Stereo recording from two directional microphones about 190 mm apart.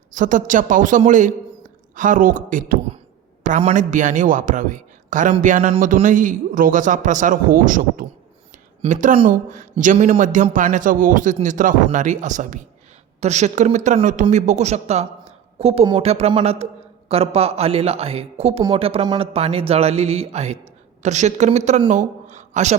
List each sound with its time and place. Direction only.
0.1 s a man's voice: 40° right (ahead or behind)